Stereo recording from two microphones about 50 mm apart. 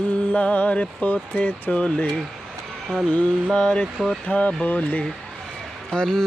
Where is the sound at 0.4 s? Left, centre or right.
Left.